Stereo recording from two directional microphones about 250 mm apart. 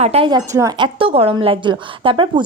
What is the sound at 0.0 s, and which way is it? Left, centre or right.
A woman's voice, right.